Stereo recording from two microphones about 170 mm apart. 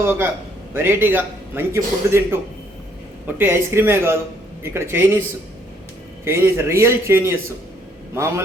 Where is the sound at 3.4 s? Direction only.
15° right (ahead or behind).